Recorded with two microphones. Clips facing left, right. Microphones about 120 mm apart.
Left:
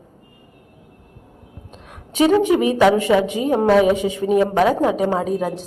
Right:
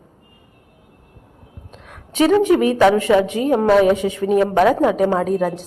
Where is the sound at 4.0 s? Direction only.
20° left (ahead or behind).